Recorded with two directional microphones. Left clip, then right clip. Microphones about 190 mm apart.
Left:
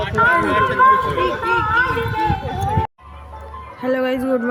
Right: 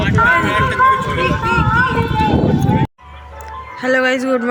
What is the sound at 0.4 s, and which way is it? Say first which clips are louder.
Run: right 1 dB; 20° left (ahead or behind).